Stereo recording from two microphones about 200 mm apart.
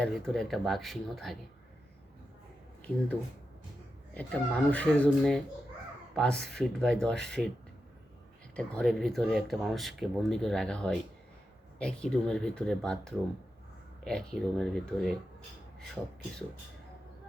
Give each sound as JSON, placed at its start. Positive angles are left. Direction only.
{"t": 0.0, "sound": "speech", "side_deg": 0}
{"t": 4.1, "sound": "speech", "side_deg": 5}
{"t": 8.5, "sound": "speech", "side_deg": 5}